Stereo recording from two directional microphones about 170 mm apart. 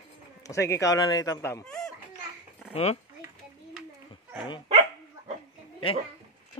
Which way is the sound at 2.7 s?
40° left (ahead or behind).